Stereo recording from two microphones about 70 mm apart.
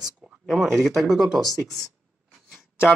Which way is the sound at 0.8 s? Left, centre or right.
Centre.